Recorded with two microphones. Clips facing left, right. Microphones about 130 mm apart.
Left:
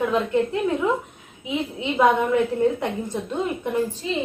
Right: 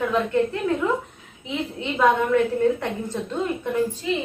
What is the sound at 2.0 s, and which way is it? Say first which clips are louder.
A woman's voice: even; 20° left (ahead or behind).